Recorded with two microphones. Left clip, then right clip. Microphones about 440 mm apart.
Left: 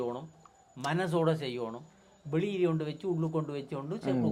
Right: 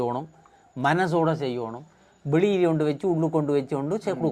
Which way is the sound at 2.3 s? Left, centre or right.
Right.